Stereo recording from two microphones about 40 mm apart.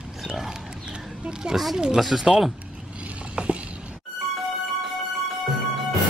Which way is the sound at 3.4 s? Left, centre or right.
Right.